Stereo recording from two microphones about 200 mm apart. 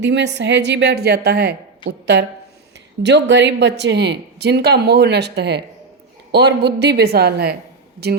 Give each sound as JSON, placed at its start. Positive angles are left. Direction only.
{"t": 0.0, "sound": "speech", "side_deg": -60}